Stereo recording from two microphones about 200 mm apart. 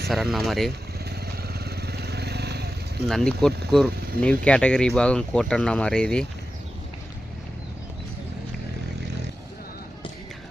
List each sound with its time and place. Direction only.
0.1 s speech: centre (ahead or behind)
1.1 s vehicle: 50° right (ahead or behind)
3.1 s speech: centre (ahead or behind)